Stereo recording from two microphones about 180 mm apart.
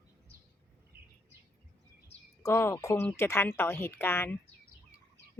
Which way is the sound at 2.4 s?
15° left (ahead or behind).